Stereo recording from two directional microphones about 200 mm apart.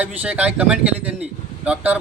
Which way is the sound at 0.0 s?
10° right (ahead or behind).